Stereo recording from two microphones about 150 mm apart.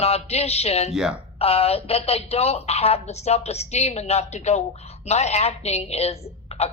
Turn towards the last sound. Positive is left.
turn(degrees=45)  # may be behind; listen again after turning